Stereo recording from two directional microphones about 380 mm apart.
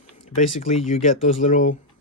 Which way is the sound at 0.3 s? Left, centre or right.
Centre.